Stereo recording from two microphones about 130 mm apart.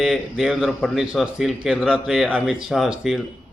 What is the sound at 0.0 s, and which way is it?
A man's voice, centre (ahead or behind).